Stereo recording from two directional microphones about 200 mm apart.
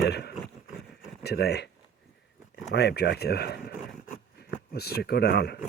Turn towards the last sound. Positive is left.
turn(degrees=55)  # may be behind; listen again after turning